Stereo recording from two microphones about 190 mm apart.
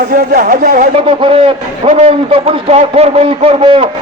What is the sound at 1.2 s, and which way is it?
A man's voice, 30° right (ahead or behind).